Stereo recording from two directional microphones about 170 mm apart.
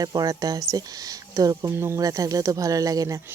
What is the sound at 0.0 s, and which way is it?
Speech, 25° right (ahead or behind).